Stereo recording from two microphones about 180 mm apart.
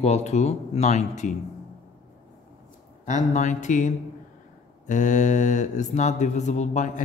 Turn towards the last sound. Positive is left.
turn(degrees=45)  # may be behind; listen again after turning